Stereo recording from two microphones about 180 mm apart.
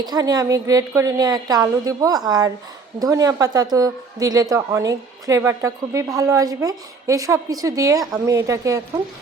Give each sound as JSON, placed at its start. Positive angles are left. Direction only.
{"t": 0.0, "sound": "a woman's voice", "side_deg": -20}